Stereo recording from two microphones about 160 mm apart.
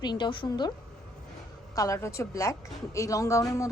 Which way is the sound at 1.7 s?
20° left (ahead or behind).